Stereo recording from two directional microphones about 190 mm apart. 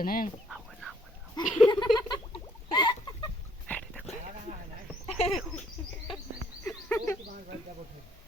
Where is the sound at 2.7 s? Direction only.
25° left (ahead or behind).